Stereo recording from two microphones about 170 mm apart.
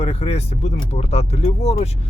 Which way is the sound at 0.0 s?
35° left (ahead or behind).